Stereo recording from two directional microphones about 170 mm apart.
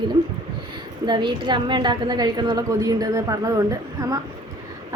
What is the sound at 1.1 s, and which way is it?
A woman's voice, 25° right (ahead or behind).